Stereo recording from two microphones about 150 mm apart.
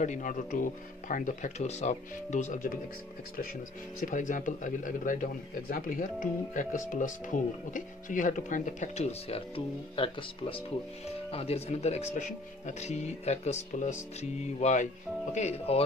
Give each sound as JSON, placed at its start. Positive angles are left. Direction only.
{"t": 0.0, "sound": "speech", "side_deg": 55}
{"t": 4.0, "sound": "speech", "side_deg": 60}
{"t": 9.9, "sound": "speech", "side_deg": 35}